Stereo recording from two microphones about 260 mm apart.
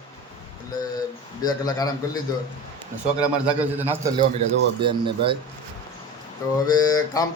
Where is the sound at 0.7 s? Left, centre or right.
Centre.